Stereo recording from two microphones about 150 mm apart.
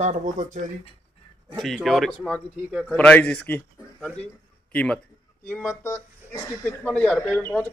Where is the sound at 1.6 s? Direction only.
Centre (ahead or behind).